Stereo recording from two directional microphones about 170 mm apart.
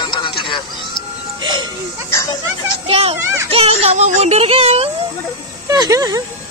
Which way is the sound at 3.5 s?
35° right (ahead or behind).